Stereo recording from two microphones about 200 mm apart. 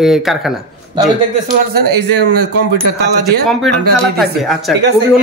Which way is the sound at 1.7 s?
55° right (ahead or behind).